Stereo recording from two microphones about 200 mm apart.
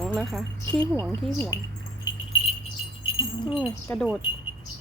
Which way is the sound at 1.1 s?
10° left (ahead or behind).